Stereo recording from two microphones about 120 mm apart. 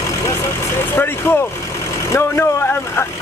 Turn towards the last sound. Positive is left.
turn(degrees=20)  # may be behind; listen again after turning